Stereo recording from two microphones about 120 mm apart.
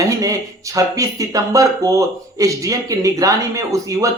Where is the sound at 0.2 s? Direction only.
25° right (ahead or behind).